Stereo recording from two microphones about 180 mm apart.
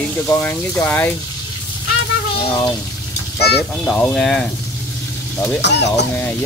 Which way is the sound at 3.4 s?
60° left (ahead or behind).